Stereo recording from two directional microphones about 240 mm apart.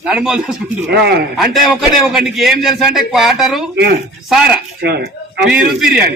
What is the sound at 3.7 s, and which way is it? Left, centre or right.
Speech, right.